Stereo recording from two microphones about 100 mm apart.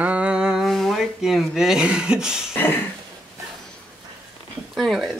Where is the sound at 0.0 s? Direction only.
15° right (ahead or behind).